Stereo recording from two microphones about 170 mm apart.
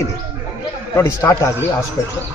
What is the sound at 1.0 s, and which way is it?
Speech, 15° left (ahead or behind).